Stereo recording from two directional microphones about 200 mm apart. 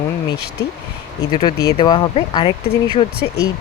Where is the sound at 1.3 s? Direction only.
20° left (ahead or behind).